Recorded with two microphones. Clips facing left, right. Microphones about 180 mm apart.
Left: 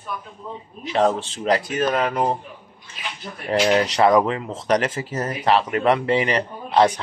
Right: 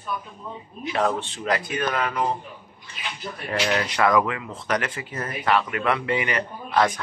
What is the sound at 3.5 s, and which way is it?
A man's voice, 30° left (ahead or behind).